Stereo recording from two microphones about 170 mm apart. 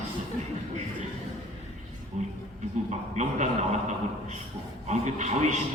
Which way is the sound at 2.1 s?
40° right (ahead or behind).